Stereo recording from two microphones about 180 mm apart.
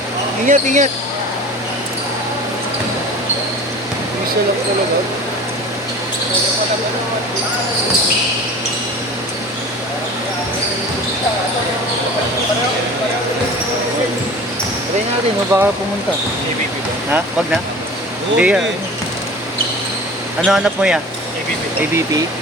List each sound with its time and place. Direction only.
0.4 s speech: 45° right (ahead or behind)
15.5 s speech: 15° right (ahead or behind)
18.3 s speech: 5° right (ahead or behind)
20.4 s speech: 5° right (ahead or behind)